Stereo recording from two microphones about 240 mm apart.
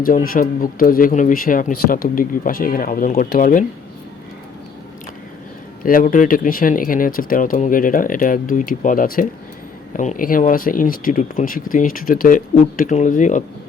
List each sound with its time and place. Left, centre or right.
0.0 s speech: left
5.8 s speech: left